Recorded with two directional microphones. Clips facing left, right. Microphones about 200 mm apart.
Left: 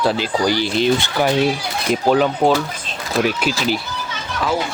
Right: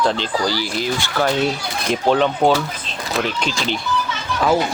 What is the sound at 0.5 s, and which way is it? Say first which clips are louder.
Speech: left 5 dB; 25° left (ahead or behind).